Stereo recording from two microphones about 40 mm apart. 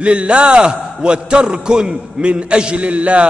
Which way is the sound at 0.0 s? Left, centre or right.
Right.